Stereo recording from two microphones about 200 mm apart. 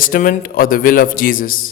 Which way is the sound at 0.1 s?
45° left (ahead or behind).